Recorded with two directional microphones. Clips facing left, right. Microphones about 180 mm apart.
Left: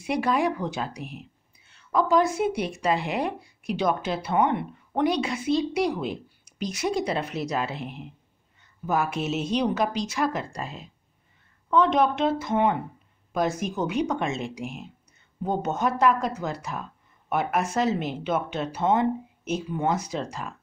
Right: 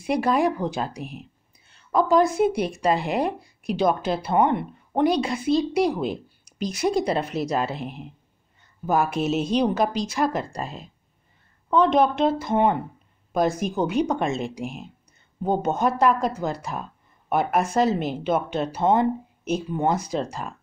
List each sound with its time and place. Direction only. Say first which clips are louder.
0.0 s speech: right 3 dB; 35° right (ahead or behind)